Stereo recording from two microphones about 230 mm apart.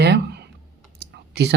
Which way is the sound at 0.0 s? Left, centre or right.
Right.